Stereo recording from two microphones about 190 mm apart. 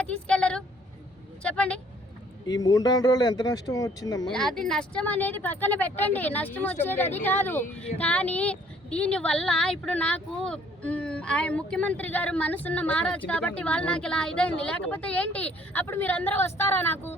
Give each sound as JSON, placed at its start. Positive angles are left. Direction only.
{"t": 0.0, "sound": "speech", "side_deg": 5}
{"t": 2.5, "sound": "speech", "side_deg": 20}
{"t": 4.3, "sound": "speech", "side_deg": 5}